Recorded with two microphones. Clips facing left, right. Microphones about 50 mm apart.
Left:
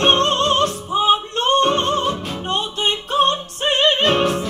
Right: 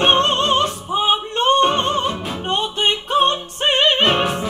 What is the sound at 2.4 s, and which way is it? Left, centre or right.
Music, right.